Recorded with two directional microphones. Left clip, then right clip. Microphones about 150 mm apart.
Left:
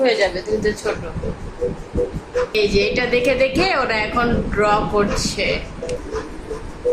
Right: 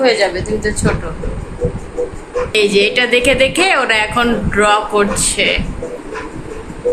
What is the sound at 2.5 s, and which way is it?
A woman's voice, centre (ahead or behind).